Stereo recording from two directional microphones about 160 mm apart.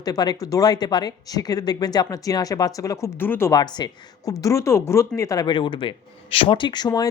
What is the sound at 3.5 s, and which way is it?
Speech, 25° left (ahead or behind).